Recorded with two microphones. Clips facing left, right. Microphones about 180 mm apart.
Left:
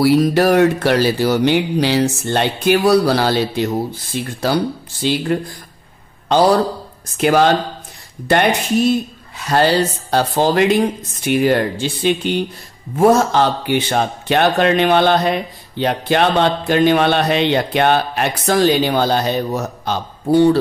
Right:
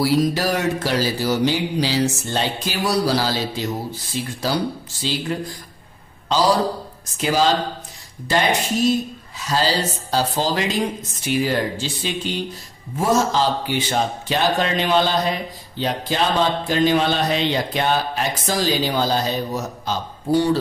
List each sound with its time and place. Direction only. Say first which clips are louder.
0.0 s a man's voice: left 6 dB; 60° left (ahead or behind)